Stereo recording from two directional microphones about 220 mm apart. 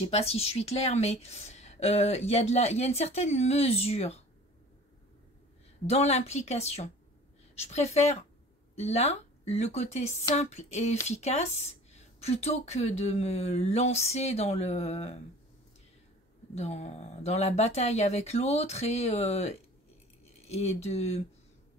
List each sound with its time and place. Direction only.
0.0 s a woman's voice: 30° left (ahead or behind)
5.9 s a woman's voice: 30° left (ahead or behind)
10.3 s a sound: 30° left (ahead or behind)
11.1 s a woman's voice: 30° left (ahead or behind)
16.5 s a woman's voice: 30° left (ahead or behind)